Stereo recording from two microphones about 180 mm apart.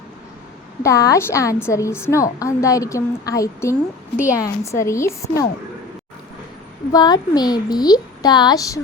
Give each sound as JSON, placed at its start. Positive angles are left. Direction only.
{"t": 0.8, "sound": "a woman's voice", "side_deg": 15}
{"t": 6.9, "sound": "a woman's voice", "side_deg": 20}